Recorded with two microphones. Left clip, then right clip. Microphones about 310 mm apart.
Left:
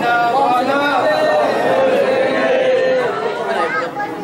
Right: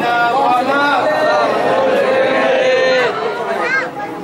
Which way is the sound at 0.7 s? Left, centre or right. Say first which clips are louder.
Right 1 dB; centre.